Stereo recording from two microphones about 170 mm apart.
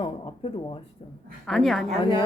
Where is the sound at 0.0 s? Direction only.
30° left (ahead or behind).